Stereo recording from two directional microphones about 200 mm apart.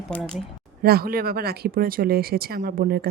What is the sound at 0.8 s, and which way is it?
Speech, 50° right (ahead or behind).